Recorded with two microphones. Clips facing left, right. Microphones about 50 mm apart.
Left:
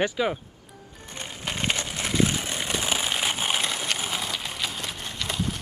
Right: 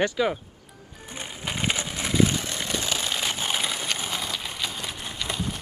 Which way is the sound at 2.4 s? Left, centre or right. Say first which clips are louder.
Left 1 dB; centre.